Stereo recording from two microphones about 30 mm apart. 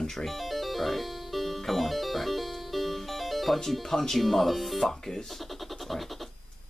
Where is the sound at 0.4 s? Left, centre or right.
Centre.